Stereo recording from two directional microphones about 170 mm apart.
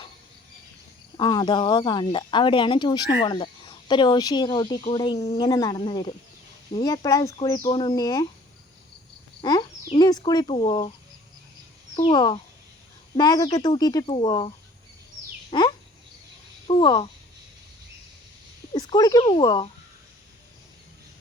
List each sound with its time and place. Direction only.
1.1 s speech: 25° left (ahead or behind)
9.4 s speech: 30° left (ahead or behind)
10.4 s speech: 35° left (ahead or behind)
12.0 s speech: 30° left (ahead or behind)
18.7 s speech: 25° left (ahead or behind)